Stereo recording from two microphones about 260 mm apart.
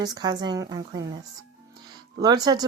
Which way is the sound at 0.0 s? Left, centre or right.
Centre.